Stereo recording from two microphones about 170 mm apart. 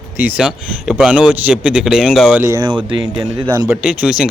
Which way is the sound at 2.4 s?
20° right (ahead or behind).